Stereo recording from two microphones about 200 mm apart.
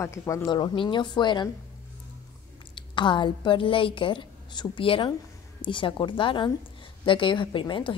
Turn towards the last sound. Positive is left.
turn(degrees=25)  # may be behind; listen again after turning